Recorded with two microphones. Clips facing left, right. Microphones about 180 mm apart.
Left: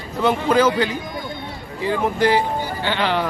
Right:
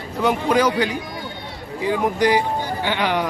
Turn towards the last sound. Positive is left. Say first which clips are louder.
# even
turn(degrees=-15)  # may be behind; listen again after turning